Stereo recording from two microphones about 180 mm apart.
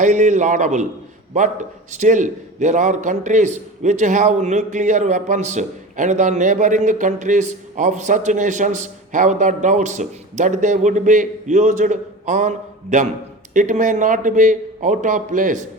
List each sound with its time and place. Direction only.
0.0 s a man's voice: 45° right (ahead or behind)